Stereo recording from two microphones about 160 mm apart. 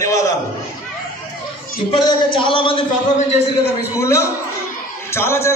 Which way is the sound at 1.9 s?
30° left (ahead or behind).